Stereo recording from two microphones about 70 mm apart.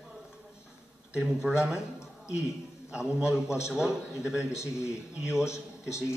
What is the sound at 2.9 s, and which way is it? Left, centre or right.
A man's voice, centre.